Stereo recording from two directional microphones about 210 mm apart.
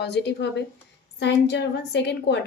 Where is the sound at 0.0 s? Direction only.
55° left (ahead or behind).